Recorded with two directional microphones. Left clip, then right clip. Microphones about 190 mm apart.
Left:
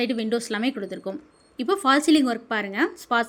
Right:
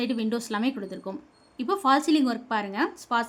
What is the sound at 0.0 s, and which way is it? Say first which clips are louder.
A woman's voice: left 4 dB; centre (ahead or behind).